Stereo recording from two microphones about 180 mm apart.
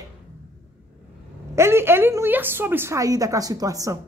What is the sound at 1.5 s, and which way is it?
A woman's voice, 15° right (ahead or behind).